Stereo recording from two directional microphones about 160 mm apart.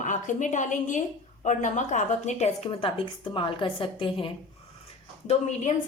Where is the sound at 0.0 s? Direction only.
50° left (ahead or behind); by 4.3 s 35° left (ahead or behind).